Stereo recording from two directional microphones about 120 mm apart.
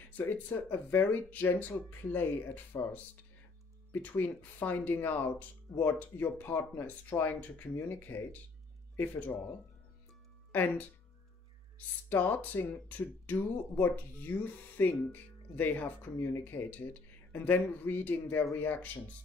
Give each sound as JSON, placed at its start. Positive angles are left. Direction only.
{"t": 0.2, "sound": "speech", "side_deg": 15}
{"t": 10.5, "sound": "speech", "side_deg": 15}
{"t": 12.1, "sound": "speech", "side_deg": 15}